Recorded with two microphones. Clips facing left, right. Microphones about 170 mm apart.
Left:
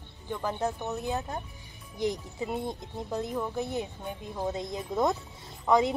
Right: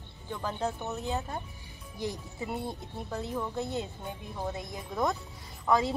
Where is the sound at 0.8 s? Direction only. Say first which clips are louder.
Left 2 dB; 15° left (ahead or behind).